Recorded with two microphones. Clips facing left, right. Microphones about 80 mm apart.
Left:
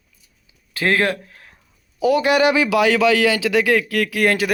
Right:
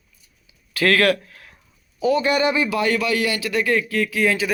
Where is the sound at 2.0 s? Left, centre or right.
Left.